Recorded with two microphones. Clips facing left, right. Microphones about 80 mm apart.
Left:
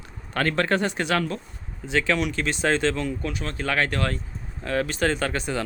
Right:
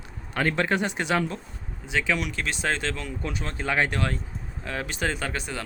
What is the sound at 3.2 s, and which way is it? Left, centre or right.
Speech, right.